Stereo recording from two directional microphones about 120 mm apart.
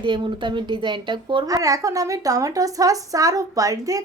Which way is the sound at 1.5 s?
30° right (ahead or behind).